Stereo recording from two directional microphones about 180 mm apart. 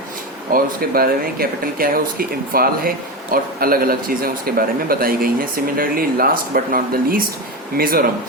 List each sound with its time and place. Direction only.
0.5 s speech: 55° right (ahead or behind)